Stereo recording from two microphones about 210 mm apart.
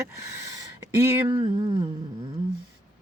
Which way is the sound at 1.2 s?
20° right (ahead or behind).